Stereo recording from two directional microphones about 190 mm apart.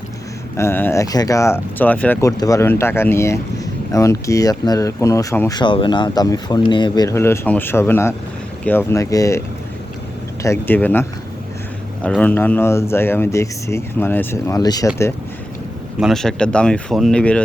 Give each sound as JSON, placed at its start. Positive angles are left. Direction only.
{"t": 0.5, "sound": "speech", "side_deg": 15}
{"t": 10.4, "sound": "speech", "side_deg": 10}
{"t": 12.0, "sound": "speech", "side_deg": 5}
{"t": 16.0, "sound": "speech", "side_deg": 0}